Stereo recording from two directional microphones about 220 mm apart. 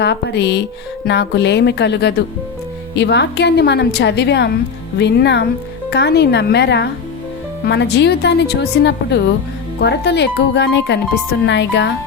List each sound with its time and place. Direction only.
0.0 s a woman's voice: 50° left (ahead or behind)